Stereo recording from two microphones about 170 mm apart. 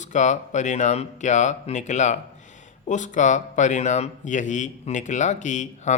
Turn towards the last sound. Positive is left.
turn(degrees=45)  # may be behind; listen again after turning